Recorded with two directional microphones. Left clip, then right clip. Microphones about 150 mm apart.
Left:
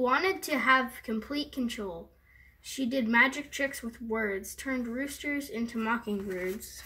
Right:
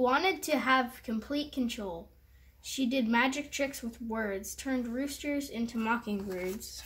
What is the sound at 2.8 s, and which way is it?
Speech, 30° right (ahead or behind).